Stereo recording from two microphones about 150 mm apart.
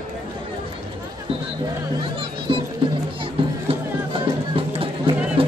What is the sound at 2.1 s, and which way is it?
Music, 35° right (ahead or behind).